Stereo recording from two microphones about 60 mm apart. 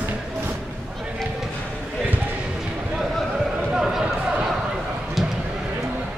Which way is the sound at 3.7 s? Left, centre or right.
Centre.